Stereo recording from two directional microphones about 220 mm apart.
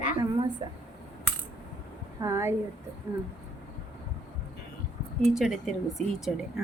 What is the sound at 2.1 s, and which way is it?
Speech, 15° right (ahead or behind).